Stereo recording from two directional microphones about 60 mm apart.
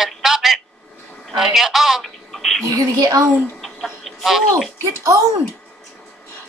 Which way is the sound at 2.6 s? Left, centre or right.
Right.